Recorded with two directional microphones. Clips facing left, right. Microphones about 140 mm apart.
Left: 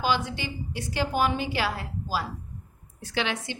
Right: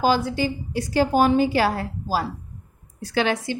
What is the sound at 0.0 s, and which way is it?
A woman's voice, 40° right (ahead or behind).